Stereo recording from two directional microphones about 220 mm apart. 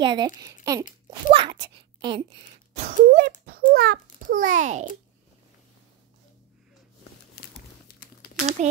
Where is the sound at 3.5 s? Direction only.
45° right (ahead or behind).